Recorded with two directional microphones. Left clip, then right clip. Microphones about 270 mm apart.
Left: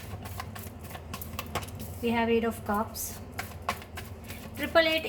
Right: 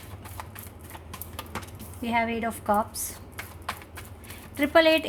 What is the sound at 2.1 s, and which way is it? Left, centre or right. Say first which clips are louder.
Speech: right 1 dB; right.